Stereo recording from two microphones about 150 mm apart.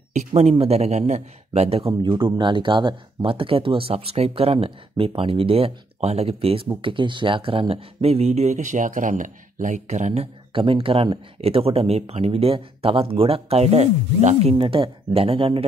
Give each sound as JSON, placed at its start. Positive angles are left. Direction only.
{"t": 0.1, "sound": "speech", "side_deg": -50}
{"t": 10.5, "sound": "speech", "side_deg": -35}